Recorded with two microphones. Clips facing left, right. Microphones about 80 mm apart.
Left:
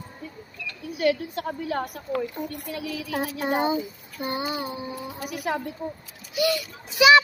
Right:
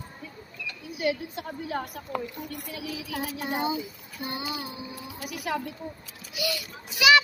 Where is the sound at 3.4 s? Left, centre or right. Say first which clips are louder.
Left 5 dB; left.